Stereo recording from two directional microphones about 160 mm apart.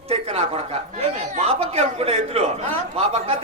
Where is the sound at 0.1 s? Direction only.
35° right (ahead or behind).